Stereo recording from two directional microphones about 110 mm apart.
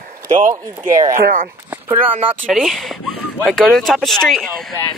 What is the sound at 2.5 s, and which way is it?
Speech, centre (ahead or behind).